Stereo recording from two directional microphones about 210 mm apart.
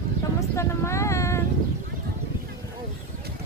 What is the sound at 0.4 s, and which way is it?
Speech, 15° left (ahead or behind).